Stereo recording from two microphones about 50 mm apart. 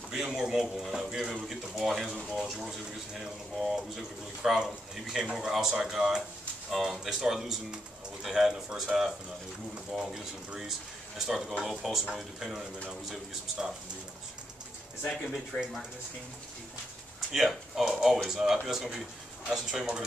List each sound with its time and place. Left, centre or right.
0.1 s speech: centre
15.5 s speech: left
17.3 s speech: centre